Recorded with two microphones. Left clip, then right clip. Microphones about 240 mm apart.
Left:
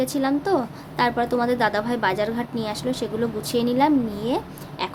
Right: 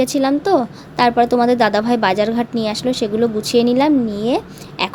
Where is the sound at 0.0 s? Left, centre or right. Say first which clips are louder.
Right 7 dB; right.